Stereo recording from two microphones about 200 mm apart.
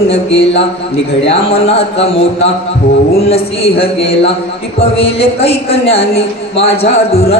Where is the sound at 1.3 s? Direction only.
30° left (ahead or behind).